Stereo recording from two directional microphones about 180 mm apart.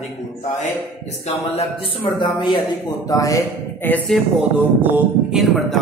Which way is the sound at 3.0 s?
20° left (ahead or behind).